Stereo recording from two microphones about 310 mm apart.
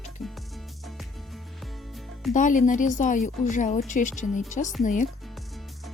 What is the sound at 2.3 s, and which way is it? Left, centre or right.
Speech, left.